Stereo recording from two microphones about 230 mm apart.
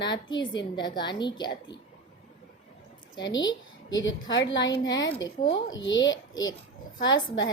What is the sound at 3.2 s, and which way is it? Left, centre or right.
Speech, centre.